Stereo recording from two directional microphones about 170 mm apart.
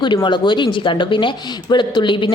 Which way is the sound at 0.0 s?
25° left (ahead or behind).